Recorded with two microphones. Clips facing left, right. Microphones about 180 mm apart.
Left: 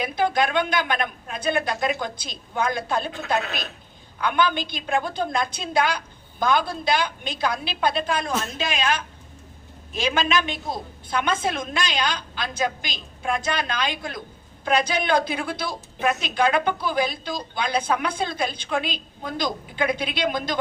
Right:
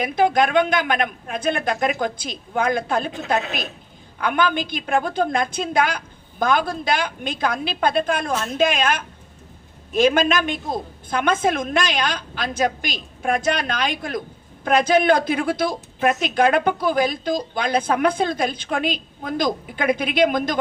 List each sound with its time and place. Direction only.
0.0 s a woman's voice: 50° right (ahead or behind)
4.2 s a woman's voice: 50° right (ahead or behind)